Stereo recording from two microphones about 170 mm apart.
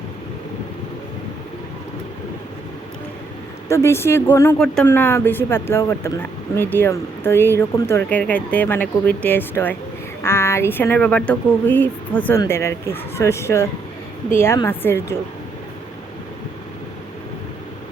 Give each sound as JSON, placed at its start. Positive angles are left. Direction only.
{"t": 3.7, "sound": "speech", "side_deg": 15}
{"t": 4.5, "sound": "speech", "side_deg": 5}